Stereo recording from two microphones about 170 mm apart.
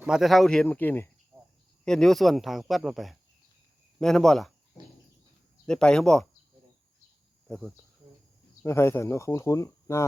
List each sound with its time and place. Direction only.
0.0 s speech: 5° right (ahead or behind)
5.6 s speech: 5° left (ahead or behind)
7.4 s cricket: centre (ahead or behind)
8.6 s speech: 15° left (ahead or behind)